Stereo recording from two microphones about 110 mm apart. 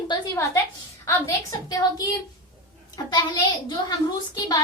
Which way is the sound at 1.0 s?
30° left (ahead or behind).